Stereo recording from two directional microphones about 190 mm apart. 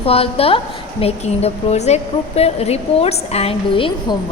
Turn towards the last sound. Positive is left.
turn(degrees=25)  # may be behind; listen again after turning